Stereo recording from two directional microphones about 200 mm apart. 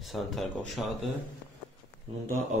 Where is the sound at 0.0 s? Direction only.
Centre (ahead or behind).